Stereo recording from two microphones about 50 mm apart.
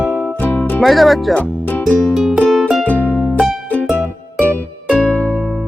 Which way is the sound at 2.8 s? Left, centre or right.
Left.